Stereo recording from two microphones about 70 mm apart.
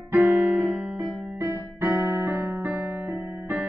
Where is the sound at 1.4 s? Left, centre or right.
Right.